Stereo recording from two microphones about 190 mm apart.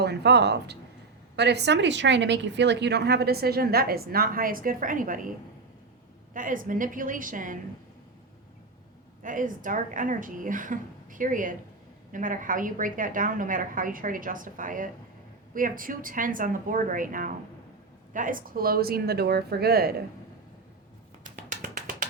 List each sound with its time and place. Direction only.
0.0 s a woman's voice: 60° right (ahead or behind); by 5.3 s 45° right (ahead or behind)
6.3 s a woman's voice: 45° right (ahead or behind)
9.2 s a woman's voice: 45° right (ahead or behind)